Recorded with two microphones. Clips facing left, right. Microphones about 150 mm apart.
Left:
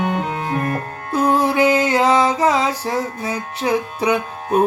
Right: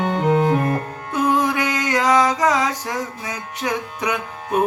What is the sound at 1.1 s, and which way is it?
Music, 35° left (ahead or behind).